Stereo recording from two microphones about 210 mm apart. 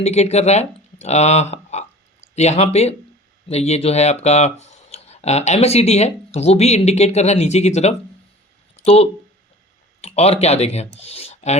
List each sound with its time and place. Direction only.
0.0 s speech: 30° left (ahead or behind)
8.7 s a sound: 30° left (ahead or behind)
10.0 s speech: 30° left (ahead or behind)